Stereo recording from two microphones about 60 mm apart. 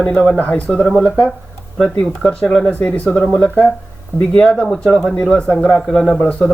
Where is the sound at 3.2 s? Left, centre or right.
Centre.